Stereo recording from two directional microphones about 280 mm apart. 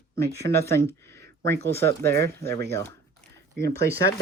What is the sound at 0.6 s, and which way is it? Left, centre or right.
Speech, centre.